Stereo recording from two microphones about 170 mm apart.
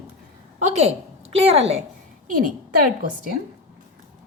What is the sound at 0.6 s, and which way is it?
Speech, 40° right (ahead or behind).